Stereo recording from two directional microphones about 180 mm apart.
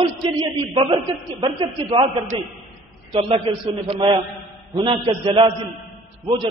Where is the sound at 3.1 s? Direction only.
30° right (ahead or behind).